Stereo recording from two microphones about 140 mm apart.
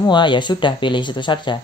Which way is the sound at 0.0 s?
35° left (ahead or behind).